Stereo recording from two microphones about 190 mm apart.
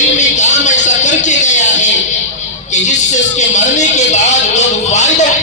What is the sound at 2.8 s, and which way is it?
Music, 40° left (ahead or behind).